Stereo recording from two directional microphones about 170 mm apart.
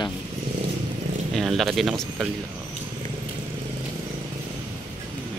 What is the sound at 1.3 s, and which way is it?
Speech, centre (ahead or behind).